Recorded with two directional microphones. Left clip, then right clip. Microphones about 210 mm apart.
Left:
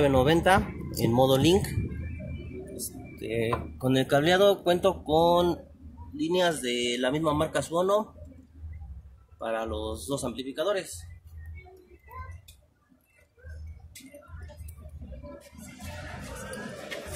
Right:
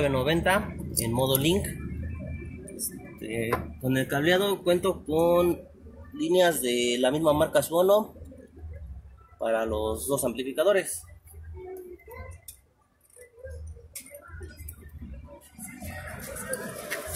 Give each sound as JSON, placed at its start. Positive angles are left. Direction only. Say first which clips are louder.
{"t": 0.0, "sound": "speech", "louder": "left 3 dB", "side_deg": 35}
{"t": 3.3, "sound": "speech", "louder": "left 1 dB", "side_deg": 30}
{"t": 6.1, "sound": "speech", "louder": "right 3 dB", "side_deg": 10}
{"t": 9.7, "sound": "speech", "louder": "right 5 dB", "side_deg": 5}